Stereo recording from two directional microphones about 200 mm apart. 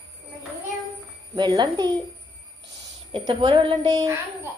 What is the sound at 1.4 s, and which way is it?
Speech, 20° right (ahead or behind).